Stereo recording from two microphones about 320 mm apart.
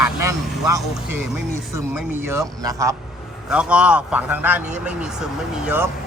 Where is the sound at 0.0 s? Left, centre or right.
Centre.